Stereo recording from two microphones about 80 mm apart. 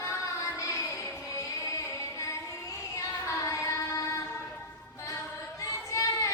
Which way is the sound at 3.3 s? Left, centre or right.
Left.